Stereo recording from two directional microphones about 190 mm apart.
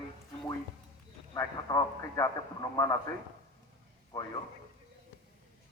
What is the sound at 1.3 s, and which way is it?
A man's voice, 20° left (ahead or behind).